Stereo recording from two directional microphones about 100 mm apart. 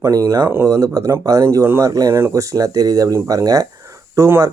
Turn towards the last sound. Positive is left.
turn(degrees=-25)  # may be behind; listen again after turning